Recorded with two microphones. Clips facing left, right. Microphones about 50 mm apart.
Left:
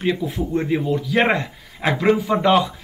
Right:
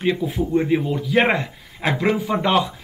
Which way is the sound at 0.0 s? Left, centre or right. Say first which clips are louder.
Right 1 dB; centre.